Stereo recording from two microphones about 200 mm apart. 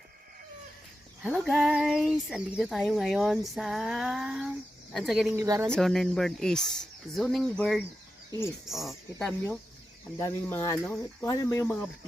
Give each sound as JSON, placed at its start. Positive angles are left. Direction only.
{"t": 1.2, "sound": "speech", "side_deg": -5}
{"t": 5.7, "sound": "speech", "side_deg": 0}
{"t": 10.2, "sound": "speech", "side_deg": 15}